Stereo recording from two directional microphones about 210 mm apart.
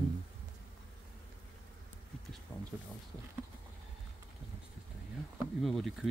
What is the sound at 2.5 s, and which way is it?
Speech, 15° left (ahead or behind).